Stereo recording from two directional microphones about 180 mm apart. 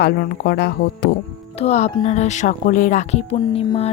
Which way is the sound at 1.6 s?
40° left (ahead or behind).